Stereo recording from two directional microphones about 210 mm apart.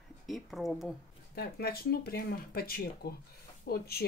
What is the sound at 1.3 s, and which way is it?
Speech, 50° left (ahead or behind).